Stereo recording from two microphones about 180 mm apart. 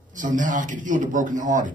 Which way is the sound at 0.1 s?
45° right (ahead or behind).